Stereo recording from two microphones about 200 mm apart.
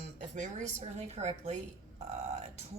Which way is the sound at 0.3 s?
35° right (ahead or behind).